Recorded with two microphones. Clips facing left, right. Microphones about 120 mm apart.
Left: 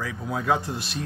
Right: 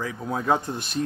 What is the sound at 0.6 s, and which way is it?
Speech, 50° right (ahead or behind).